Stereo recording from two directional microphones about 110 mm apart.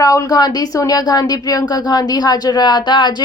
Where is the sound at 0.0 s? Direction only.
30° left (ahead or behind).